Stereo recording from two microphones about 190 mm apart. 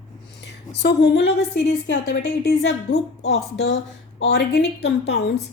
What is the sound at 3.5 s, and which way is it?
Speech, 90° left.